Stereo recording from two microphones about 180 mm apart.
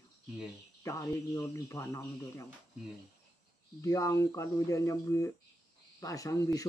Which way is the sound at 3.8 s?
15° left (ahead or behind).